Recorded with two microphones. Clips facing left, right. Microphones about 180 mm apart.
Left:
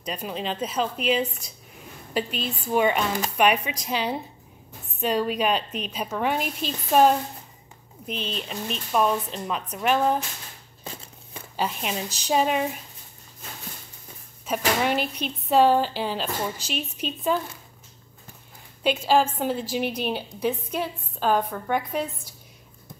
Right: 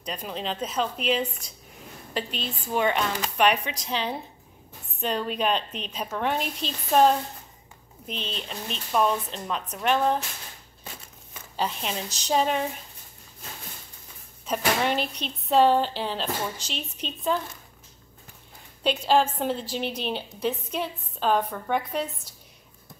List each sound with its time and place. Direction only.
0.0 s a woman's voice: 5° left (ahead or behind)
11.5 s a woman's voice: 5° left (ahead or behind)
14.4 s speech: 5° left (ahead or behind)
18.8 s speech: 5° left (ahead or behind)